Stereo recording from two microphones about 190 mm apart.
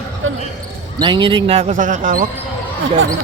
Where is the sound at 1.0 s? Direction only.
25° right (ahead or behind).